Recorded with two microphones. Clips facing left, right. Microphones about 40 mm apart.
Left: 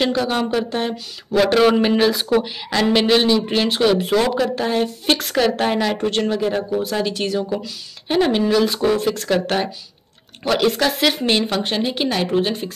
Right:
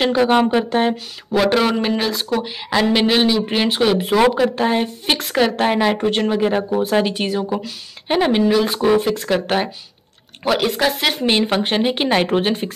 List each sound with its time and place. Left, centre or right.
0.0 s speech: right
1.3 s speech: centre
2.4 s speech: centre
11.2 s speech: right